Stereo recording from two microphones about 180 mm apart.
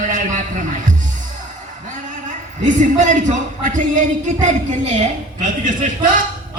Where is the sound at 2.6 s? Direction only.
45° right (ahead or behind).